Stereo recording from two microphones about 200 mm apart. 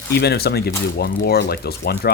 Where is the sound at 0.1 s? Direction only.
55° left (ahead or behind).